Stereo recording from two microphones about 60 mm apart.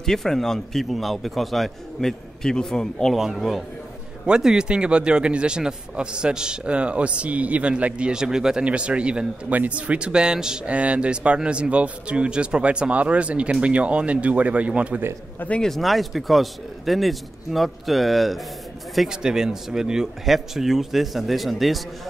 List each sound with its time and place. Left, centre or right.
0.0 s a man's voice: centre
3.2 s a man's voice: centre; by 15.0 s right
15.3 s speech: left
15.6 s a man's voice: centre
19.0 s a man's voice: centre